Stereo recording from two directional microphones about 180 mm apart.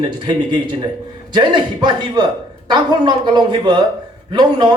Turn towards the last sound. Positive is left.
turn(degrees=-25)  # may be behind; listen again after turning